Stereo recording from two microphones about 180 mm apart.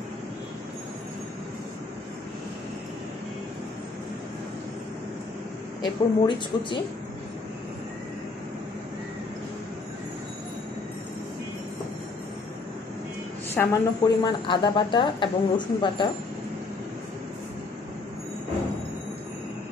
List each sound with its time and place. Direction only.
5.8 s speech: 25° left (ahead or behind)
13.6 s speech: 20° left (ahead or behind)